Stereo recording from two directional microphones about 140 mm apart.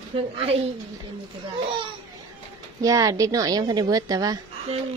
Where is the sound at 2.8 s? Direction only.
25° right (ahead or behind).